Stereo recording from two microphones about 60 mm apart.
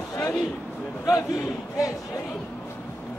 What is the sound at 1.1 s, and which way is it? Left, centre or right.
Speech, left.